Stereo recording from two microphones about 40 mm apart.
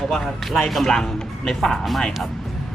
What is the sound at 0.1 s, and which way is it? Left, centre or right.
Speech, centre.